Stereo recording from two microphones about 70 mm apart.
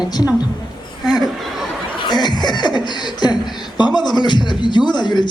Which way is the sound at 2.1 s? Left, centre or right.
Left.